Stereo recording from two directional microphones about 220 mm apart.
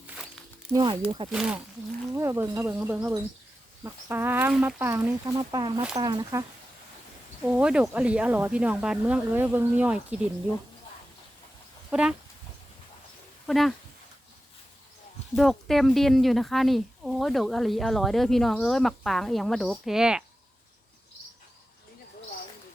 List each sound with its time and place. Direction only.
0.7 s speech: 20° right (ahead or behind)
1.3 s speech: 5° right (ahead or behind)
7.4 s speech: 5° right (ahead or behind)
11.9 s speech: 5° right (ahead or behind)
13.5 s speech: centre (ahead or behind)
15.4 s speech: centre (ahead or behind)